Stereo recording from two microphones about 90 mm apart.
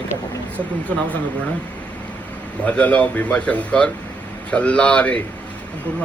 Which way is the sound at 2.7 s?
15° left (ahead or behind).